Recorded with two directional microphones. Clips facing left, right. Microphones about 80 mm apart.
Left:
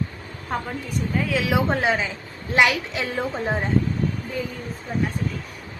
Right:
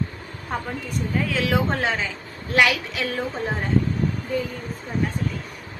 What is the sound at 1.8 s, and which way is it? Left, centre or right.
A woman's voice, centre.